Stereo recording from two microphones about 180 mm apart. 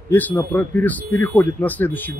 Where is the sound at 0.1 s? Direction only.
10° left (ahead or behind).